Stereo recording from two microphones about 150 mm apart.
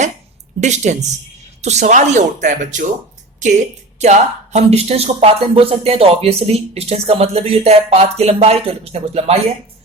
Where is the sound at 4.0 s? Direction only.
50° right (ahead or behind).